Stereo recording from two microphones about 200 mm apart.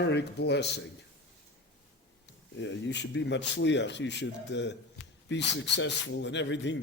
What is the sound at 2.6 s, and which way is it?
A man's voice, 65° left (ahead or behind).